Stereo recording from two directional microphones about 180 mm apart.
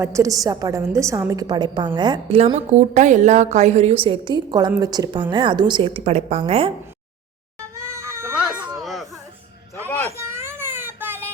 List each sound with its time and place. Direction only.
0.0 s a woman's voice: 15° right (ahead or behind)
7.8 s goat: 15° right (ahead or behind); by 9.0 s centre (ahead or behind)
10.1 s a sound: 15° right (ahead or behind)